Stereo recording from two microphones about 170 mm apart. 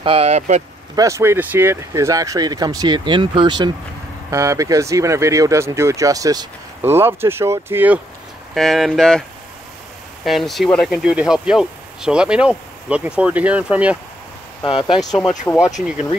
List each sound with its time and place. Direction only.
0.0 s speech: 35° right (ahead or behind)
0.9 s speech: 20° right (ahead or behind)
8.5 s speech: centre (ahead or behind)
10.2 s speech: centre (ahead or behind)
14.6 s speech: 30° left (ahead or behind)
15.5 s speech: 15° left (ahead or behind)